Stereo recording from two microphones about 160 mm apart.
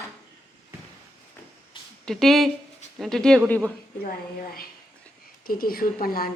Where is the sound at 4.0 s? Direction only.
65° left (ahead or behind).